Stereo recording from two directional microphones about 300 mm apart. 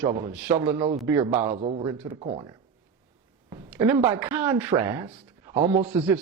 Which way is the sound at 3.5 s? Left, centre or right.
Centre.